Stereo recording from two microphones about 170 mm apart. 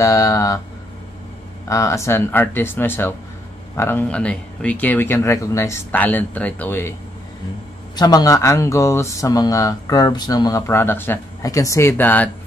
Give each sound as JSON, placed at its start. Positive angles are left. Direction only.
{"t": 0.0, "sound": "speech", "side_deg": 20}
{"t": 1.7, "sound": "speech", "side_deg": 20}
{"t": 7.9, "sound": "speech", "side_deg": 25}